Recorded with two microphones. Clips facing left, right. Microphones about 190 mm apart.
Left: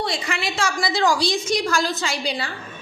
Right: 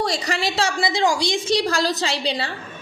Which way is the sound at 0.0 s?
40° right (ahead or behind).